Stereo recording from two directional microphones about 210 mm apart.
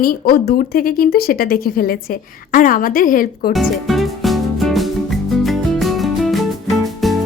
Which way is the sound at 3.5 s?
Centre (ahead or behind).